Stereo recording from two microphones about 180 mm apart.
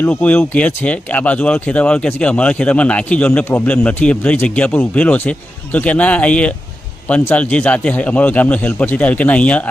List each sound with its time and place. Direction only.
0.0 s speech: 10° left (ahead or behind)